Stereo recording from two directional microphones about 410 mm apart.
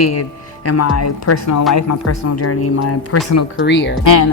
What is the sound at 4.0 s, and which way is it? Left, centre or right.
Speech, left.